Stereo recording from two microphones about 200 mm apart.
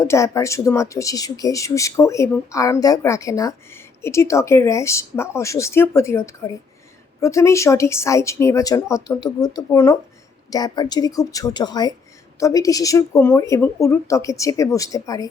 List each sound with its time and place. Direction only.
0.0 s speech: 15° left (ahead or behind)